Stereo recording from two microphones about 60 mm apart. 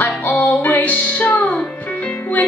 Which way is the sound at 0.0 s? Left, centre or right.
Left.